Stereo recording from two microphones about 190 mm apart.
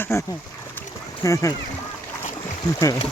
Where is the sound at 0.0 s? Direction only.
15° left (ahead or behind).